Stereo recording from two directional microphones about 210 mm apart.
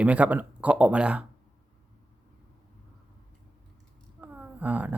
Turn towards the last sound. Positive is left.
turn(degrees=-5)  # may be behind; listen again after turning